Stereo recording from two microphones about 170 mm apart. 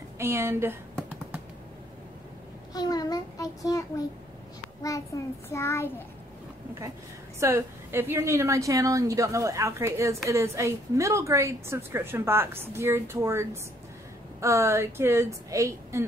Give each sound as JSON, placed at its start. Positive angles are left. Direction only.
{"t": 0.2, "sound": "a woman's voice", "side_deg": -15}
{"t": 2.7, "sound": "a child's voice", "side_deg": 25}
{"t": 4.8, "sound": "a child's voice", "side_deg": 20}
{"t": 7.3, "sound": "a woman's voice", "side_deg": -15}